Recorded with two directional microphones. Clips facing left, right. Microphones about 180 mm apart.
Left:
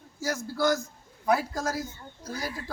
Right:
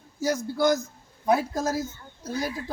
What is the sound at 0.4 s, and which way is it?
Speech, 20° right (ahead or behind).